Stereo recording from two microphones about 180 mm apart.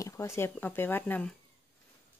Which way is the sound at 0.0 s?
15° left (ahead or behind).